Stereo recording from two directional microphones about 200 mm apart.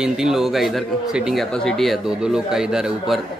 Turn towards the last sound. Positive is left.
turn(degrees=0)  # may be behind; listen again after turning